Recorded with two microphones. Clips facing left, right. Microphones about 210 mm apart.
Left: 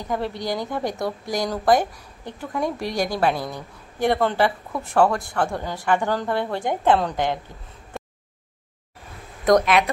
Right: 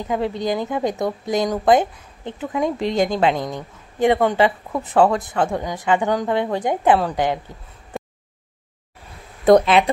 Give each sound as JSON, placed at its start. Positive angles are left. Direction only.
{"t": 0.4, "sound": "speech", "side_deg": -20}
{"t": 9.5, "sound": "speech", "side_deg": -30}